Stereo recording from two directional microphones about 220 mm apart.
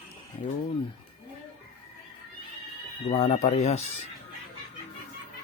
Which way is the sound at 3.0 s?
25° left (ahead or behind).